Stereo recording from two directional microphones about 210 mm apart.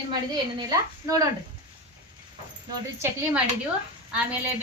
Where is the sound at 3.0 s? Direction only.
10° right (ahead or behind).